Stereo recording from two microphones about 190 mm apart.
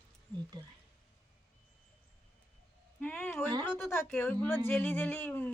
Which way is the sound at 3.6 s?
10° left (ahead or behind).